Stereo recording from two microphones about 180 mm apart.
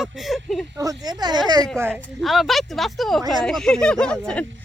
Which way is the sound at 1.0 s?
20° right (ahead or behind).